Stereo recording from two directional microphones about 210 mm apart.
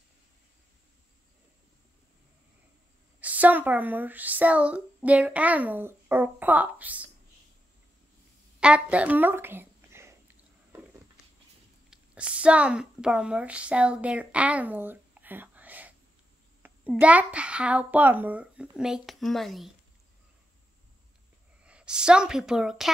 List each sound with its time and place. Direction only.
3.2 s speech: 5° right (ahead or behind)
8.5 s a sound: 5° right (ahead or behind)
11.9 s a woman's voice: 5° right (ahead or behind)
21.6 s a woman's voice: 5° right (ahead or behind)